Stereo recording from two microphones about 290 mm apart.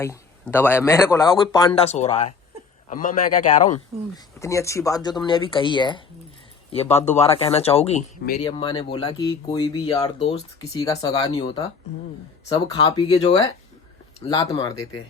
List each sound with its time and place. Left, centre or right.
0.0 s speech: centre; by 3.8 s left
4.4 s speech: centre; by 8.4 s left
8.4 s speech: centre